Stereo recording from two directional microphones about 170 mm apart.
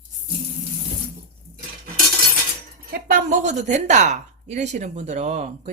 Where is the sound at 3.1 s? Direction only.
50° right (ahead or behind).